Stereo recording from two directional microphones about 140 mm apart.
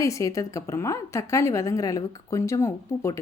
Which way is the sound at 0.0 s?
20° left (ahead or behind).